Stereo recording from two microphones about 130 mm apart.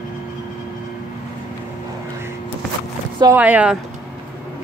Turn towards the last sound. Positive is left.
turn(degrees=-10)  # may be behind; listen again after turning